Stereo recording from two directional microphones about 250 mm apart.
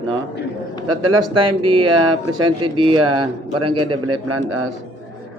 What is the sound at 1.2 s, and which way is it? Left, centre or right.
Speech, centre.